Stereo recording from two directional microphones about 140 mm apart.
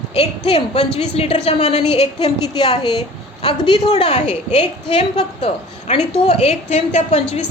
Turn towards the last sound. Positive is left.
turn(degrees=45)  # may be behind; listen again after turning